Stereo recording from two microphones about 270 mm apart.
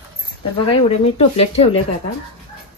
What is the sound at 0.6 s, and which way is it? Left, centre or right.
Speech, left.